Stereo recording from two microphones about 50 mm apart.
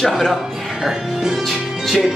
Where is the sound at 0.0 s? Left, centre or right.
Centre.